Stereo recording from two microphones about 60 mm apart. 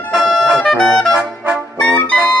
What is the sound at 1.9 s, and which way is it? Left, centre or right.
Music, left.